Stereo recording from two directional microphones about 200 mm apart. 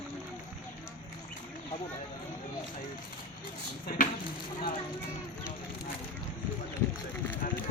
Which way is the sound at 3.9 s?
45° left (ahead or behind).